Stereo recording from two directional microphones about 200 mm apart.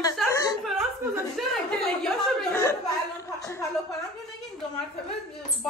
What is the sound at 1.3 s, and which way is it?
A woman's voice, centre (ahead or behind).